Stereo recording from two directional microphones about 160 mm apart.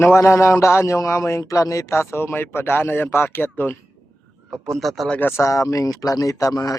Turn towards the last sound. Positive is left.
turn(degrees=20)  # may be behind; listen again after turning